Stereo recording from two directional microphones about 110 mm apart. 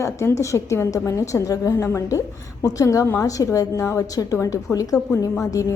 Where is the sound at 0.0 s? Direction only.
25° left (ahead or behind).